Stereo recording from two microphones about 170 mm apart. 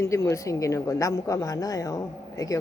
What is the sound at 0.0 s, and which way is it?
Speech, 15° left (ahead or behind).